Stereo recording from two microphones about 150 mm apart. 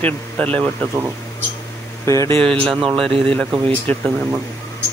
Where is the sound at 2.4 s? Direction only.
5° left (ahead or behind).